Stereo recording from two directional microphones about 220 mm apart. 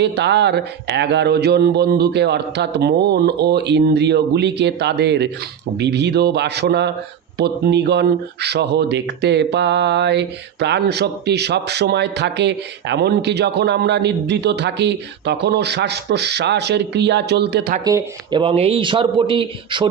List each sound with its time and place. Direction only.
0.0 s speech: 50° right (ahead or behind)
17.8 s speech: 20° right (ahead or behind)